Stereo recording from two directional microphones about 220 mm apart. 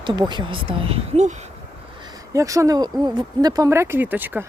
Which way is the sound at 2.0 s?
15° right (ahead or behind).